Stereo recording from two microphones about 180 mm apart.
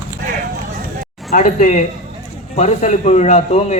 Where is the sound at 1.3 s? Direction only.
45° left (ahead or behind).